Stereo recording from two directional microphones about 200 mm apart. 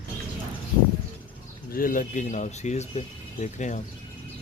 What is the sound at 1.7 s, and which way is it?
Speech, 45° left (ahead or behind).